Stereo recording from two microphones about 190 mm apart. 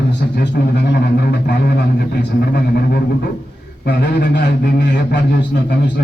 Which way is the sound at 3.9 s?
65° left (ahead or behind).